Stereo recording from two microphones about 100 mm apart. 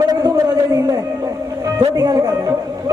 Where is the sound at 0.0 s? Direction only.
40° right (ahead or behind).